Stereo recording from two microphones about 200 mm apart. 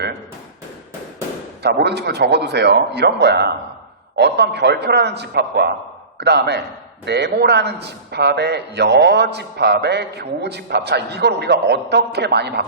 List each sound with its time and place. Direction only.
1.6 s a man's voice: 55° right (ahead or behind)